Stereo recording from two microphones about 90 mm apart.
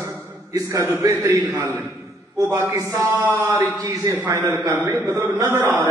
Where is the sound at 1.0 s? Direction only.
45° right (ahead or behind).